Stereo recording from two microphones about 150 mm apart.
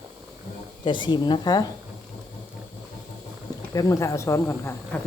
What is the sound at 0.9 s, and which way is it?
Speech, 30° left (ahead or behind).